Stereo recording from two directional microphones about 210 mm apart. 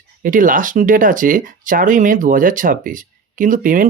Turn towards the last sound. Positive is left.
turn(degrees=-40)  # may be behind; listen again after turning